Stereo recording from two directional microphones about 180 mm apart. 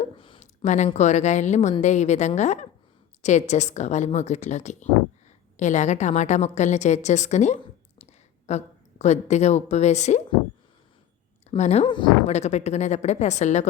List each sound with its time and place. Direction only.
0.0 s a sound: 35° left (ahead or behind)
0.9 s a woman's voice: 40° left (ahead or behind)
11.5 s speech: 40° left (ahead or behind)
12.3 s a woman's voice: 40° left (ahead or behind)